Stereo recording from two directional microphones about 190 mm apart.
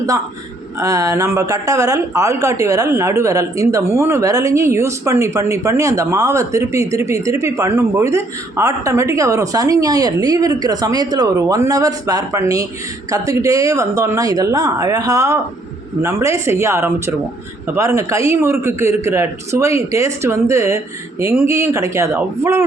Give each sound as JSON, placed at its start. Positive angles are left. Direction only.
{"t": 0.8, "sound": "speech", "side_deg": -15}